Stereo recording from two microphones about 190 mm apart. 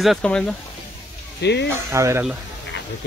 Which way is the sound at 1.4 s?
65° left (ahead or behind).